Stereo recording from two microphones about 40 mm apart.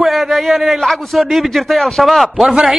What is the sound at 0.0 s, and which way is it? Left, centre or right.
Speech, centre.